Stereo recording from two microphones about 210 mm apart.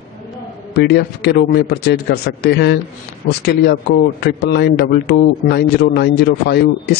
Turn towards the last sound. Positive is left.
turn(degrees=50)  # may be behind; listen again after turning